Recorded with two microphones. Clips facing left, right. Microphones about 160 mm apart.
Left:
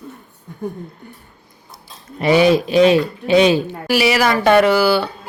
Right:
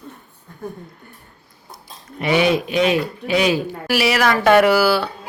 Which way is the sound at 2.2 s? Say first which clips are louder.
Left 4 dB; 35° left (ahead or behind).